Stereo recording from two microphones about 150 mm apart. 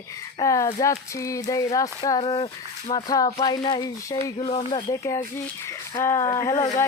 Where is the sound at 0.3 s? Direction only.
20° left (ahead or behind).